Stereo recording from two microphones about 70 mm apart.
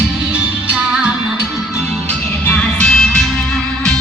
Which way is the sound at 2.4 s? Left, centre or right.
Left.